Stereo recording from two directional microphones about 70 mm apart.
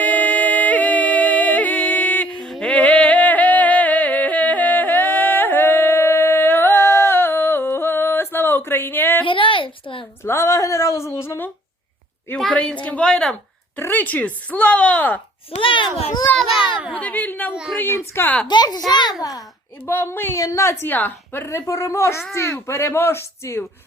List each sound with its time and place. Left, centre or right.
0.0 s music: left
2.5 s a sound: centre; by 9.2 s left
10.2 s a sound: left
12.4 s a woman's voice: centre
13.7 s speech: left
16.3 s a child's voice: centre
16.9 s speech: left
18.4 s a child's voice: left
19.9 s speech: left
20.3 s a woman's voice: left
20.8 s speech: left
21.4 s a woman's voice: left